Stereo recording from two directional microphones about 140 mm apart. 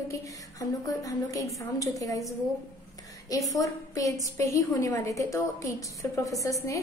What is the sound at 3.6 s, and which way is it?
A woman's voice, 25° left (ahead or behind).